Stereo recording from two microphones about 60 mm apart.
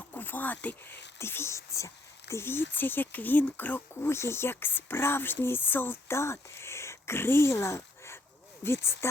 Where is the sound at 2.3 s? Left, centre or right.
Left.